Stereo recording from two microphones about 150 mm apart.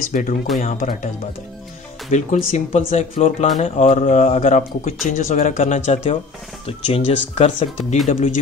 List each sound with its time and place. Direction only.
0.1 s speech: 60° left (ahead or behind)